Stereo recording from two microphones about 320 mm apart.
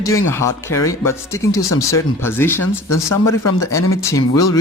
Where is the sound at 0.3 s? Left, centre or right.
Centre.